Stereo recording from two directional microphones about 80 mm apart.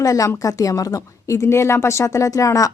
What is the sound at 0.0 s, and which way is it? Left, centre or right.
A woman's voice, left.